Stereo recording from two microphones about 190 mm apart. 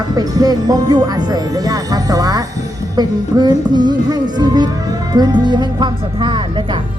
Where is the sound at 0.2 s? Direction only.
20° right (ahead or behind).